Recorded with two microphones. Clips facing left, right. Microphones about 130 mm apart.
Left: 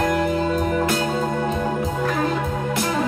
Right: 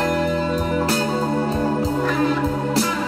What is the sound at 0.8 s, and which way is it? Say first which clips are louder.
Music: right 1 dB; 35° right (ahead or behind).